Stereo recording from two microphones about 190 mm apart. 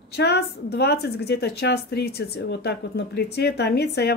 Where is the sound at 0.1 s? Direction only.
60° left (ahead or behind).